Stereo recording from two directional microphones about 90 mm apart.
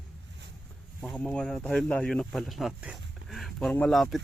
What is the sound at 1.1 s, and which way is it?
Speech, 10° left (ahead or behind).